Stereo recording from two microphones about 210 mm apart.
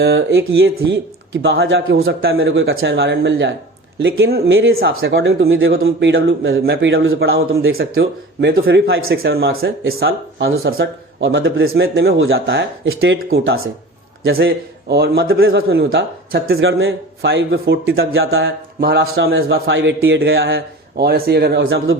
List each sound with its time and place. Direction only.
0.0 s a man's voice: 55° right (ahead or behind)
2.6 s speech: 50° right (ahead or behind)
4.5 s a man's voice: 70° right (ahead or behind)
6.6 s speech: 50° right (ahead or behind); by 7.2 s 65° right (ahead or behind)
7.9 s speech: 55° right (ahead or behind)
9.1 s speech: 50° right (ahead or behind); by 11.8 s 70° right (ahead or behind)
11.8 s speech: 55° right (ahead or behind)
18.0 s a man's voice: 75° right (ahead or behind)
18.8 s speech: 50° right (ahead or behind)
19.2 s speech: 65° right (ahead or behind)